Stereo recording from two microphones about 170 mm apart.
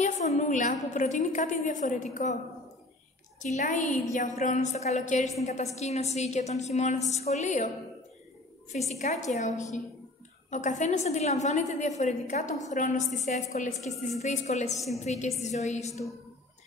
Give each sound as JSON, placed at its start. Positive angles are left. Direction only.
{"t": 0.0, "sound": "a woman's voice", "side_deg": 40}
{"t": 3.4, "sound": "a woman's voice", "side_deg": 50}
{"t": 8.9, "sound": "a woman's voice", "side_deg": 40}
{"t": 10.5, "sound": "a woman's voice", "side_deg": 45}